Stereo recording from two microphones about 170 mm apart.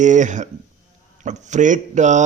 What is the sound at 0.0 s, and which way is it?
Speech, 45° right (ahead or behind).